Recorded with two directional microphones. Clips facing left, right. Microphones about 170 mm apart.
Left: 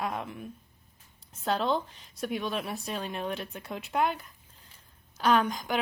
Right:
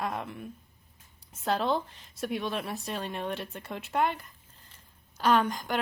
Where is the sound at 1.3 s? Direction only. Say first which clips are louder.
Even; centre (ahead or behind).